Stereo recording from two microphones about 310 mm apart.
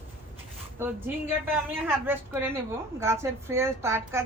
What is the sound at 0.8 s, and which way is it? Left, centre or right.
A woman's voice, centre.